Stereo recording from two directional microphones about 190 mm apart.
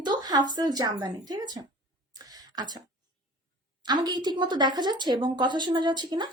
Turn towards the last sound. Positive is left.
turn(degrees=-20)  # may be behind; listen again after turning